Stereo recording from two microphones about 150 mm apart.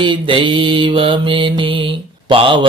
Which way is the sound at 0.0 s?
35° right (ahead or behind).